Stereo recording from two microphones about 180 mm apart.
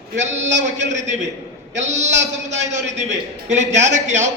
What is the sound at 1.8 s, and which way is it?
A man's voice, 40° right (ahead or behind).